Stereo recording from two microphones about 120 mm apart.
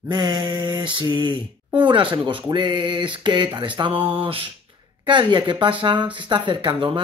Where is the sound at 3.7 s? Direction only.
50° right (ahead or behind).